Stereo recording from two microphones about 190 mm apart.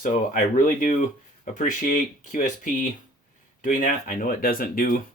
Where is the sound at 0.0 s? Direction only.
45° left (ahead or behind).